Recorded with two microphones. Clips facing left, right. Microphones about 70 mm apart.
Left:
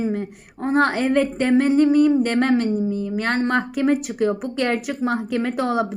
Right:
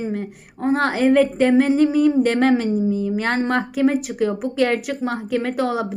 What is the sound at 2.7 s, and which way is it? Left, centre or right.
Speech, centre.